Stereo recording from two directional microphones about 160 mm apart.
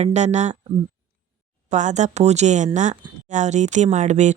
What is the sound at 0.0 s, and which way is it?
Speech, 45° right (ahead or behind).